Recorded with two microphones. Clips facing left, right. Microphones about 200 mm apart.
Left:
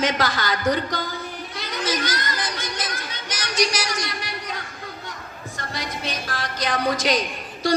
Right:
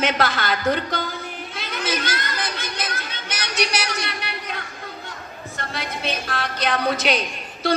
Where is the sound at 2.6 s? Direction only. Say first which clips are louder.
Even; 60° right (ahead or behind).